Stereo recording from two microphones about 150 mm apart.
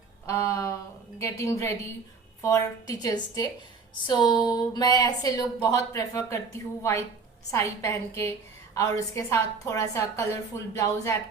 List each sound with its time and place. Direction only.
0.3 s speech: 20° left (ahead or behind)